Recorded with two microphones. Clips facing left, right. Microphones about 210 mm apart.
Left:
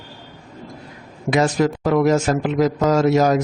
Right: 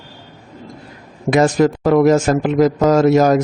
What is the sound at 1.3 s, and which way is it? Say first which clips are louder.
A man's voice: right 4 dB; 50° right (ahead or behind).